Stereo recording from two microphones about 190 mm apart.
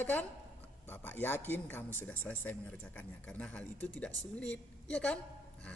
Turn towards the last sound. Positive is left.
turn(degrees=5)  # may be behind; listen again after turning